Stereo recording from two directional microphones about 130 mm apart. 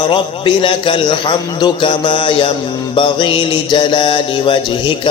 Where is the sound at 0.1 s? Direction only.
40° left (ahead or behind).